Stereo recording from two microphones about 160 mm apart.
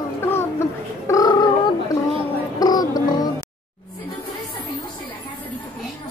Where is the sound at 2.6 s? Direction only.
25° left (ahead or behind).